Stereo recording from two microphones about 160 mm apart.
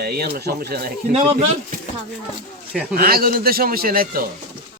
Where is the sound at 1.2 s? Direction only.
40° right (ahead or behind).